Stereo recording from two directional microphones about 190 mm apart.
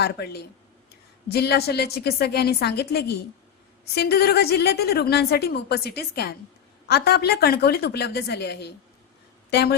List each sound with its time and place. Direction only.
0.0 s a woman's voice: 60° left (ahead or behind)